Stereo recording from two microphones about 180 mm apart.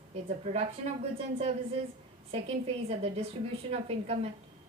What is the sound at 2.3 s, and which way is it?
A woman's voice, 35° right (ahead or behind).